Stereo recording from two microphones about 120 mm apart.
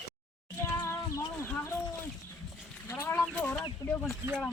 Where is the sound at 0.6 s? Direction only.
20° left (ahead or behind).